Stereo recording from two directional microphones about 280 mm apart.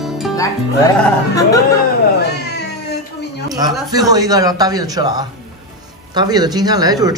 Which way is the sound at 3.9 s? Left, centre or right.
Centre.